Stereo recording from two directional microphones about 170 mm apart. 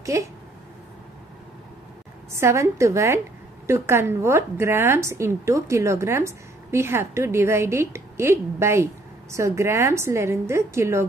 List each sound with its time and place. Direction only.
0.0 s speech: 20° right (ahead or behind)
2.3 s a woman's voice: 15° right (ahead or behind)